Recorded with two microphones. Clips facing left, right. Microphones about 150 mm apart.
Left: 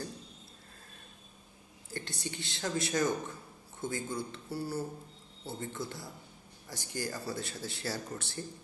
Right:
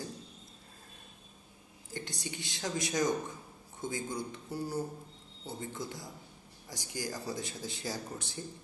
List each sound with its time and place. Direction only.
1.9 s speech: 15° right (ahead or behind)